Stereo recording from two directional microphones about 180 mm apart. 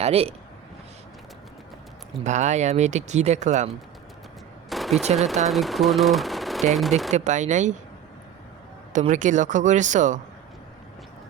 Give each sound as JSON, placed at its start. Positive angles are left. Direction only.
{"t": 0.0, "sound": "speech", "side_deg": -35}
{"t": 2.2, "sound": "speech", "side_deg": -40}
{"t": 4.7, "sound": "a sound", "side_deg": 0}
{"t": 5.1, "sound": "speech", "side_deg": 0}
{"t": 7.1, "sound": "speech", "side_deg": -40}
{"t": 8.9, "sound": "speech", "side_deg": -45}